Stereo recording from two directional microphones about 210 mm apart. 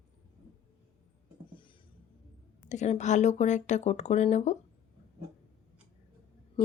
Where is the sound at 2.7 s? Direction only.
35° left (ahead or behind).